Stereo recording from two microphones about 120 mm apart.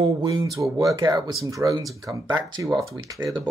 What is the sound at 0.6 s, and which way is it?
Speech, 30° right (ahead or behind).